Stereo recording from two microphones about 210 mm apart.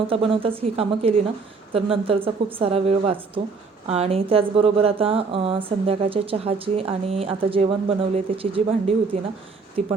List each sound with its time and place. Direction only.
0.1 s speech: 25° right (ahead or behind)